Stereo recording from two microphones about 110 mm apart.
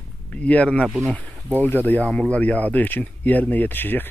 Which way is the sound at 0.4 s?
10° left (ahead or behind).